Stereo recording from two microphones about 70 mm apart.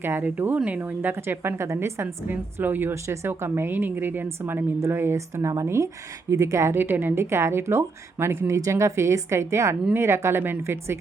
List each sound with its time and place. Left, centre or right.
0.0 s speech: right
5.3 s speech: right